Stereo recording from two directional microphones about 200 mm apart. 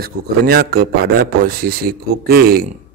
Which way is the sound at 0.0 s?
50° right (ahead or behind).